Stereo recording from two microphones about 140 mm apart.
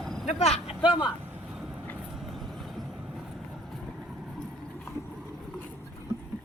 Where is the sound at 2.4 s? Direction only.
Centre (ahead or behind).